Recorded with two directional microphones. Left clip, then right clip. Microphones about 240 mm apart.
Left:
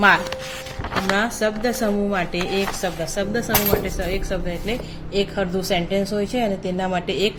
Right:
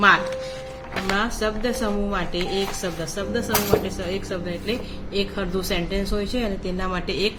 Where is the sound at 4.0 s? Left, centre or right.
Centre.